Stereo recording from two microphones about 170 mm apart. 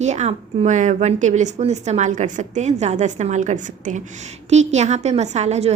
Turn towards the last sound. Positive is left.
turn(degrees=-40)  # may be behind; listen again after turning